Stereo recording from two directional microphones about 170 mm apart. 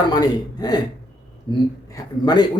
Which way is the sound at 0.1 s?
25° left (ahead or behind).